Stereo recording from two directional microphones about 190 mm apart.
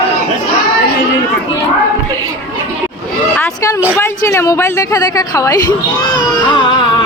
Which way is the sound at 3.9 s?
15° left (ahead or behind).